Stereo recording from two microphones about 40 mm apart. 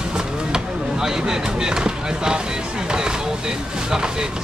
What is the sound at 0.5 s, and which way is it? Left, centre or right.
Speech, centre.